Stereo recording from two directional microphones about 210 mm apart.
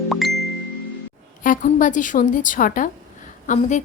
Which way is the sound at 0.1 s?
Centre (ahead or behind).